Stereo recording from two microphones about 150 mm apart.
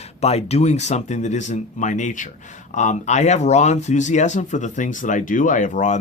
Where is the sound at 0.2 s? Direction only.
45° left (ahead or behind).